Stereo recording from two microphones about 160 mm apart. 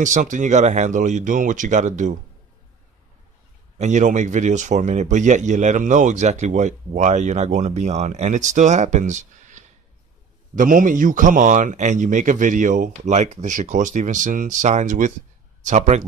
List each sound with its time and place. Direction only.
0.0 s speech: 50° right (ahead or behind)
3.7 s speech: 50° right (ahead or behind)